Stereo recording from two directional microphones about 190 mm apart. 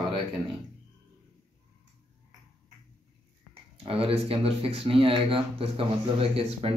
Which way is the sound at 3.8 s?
30° right (ahead or behind).